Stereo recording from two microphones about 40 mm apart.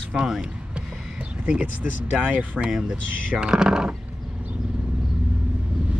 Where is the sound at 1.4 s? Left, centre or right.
Right.